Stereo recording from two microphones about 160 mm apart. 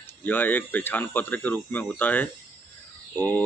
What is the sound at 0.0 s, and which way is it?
Speech, 10° left (ahead or behind).